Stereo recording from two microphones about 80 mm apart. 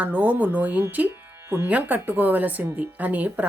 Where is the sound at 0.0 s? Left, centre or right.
Centre.